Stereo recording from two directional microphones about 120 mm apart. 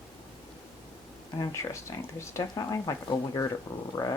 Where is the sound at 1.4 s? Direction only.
25° left (ahead or behind).